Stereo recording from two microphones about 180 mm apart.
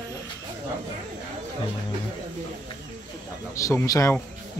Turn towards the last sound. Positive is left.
turn(degrees=15)  # may be behind; listen again after turning